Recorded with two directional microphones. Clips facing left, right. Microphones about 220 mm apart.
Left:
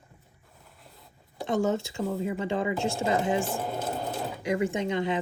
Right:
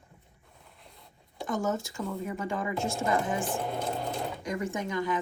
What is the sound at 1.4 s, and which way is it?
Speech, 25° left (ahead or behind).